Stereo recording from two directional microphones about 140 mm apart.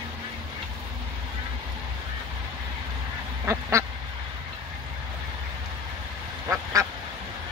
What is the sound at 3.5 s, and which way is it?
Duck, 20° right (ahead or behind).